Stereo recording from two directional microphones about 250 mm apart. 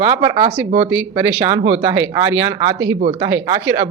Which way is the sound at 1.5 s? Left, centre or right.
Right.